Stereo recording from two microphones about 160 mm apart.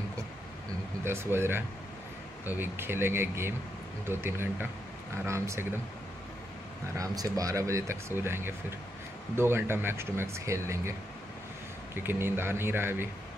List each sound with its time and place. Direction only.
1.0 s speech: 15° right (ahead or behind)
7.0 s speech: 20° right (ahead or behind)